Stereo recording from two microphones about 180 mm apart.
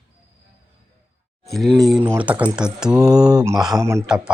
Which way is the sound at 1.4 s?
Centre (ahead or behind).